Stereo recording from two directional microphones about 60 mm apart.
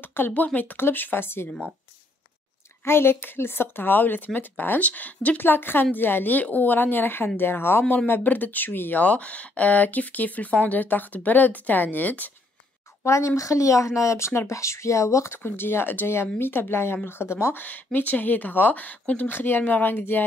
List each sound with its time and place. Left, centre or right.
0.0 s a sound: left
0.3 s speech: left
2.8 s speech: left
13.0 s a woman's voice: left
15.3 s speech: left
17.6 s speech: left